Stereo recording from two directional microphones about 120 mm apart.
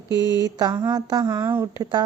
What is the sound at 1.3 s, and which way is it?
Speech, 20° right (ahead or behind).